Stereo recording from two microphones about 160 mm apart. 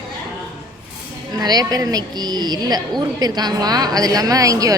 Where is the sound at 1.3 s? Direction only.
25° right (ahead or behind).